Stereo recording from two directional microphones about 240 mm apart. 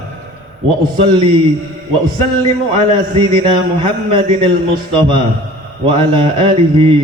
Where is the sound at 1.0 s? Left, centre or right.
Right.